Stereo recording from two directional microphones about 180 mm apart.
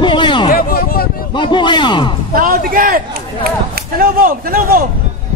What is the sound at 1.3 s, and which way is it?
Speech, 25° left (ahead or behind).